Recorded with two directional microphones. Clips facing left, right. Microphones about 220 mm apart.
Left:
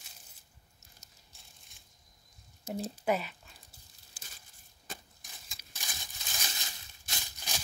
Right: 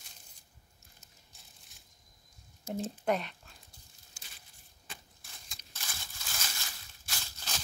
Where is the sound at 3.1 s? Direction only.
5° left (ahead or behind).